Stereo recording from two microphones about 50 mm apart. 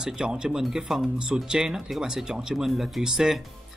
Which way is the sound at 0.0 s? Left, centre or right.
Centre.